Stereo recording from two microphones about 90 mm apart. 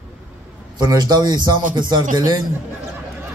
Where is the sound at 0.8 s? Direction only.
50° right (ahead or behind).